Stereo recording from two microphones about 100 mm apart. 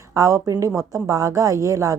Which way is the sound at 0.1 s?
30° right (ahead or behind).